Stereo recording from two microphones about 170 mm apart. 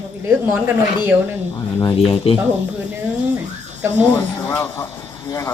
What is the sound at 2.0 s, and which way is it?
Speech, 35° left (ahead or behind).